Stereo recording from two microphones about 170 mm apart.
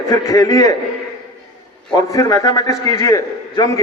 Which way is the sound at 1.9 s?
20° left (ahead or behind).